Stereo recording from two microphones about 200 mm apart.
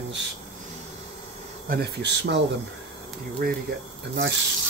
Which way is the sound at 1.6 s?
55° right (ahead or behind).